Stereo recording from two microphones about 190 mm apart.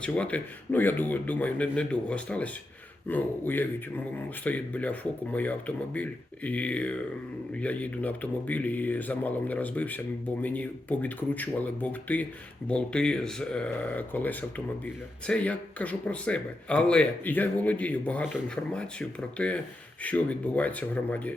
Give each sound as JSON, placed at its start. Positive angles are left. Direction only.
{"t": 0.0, "sound": "speech", "side_deg": 5}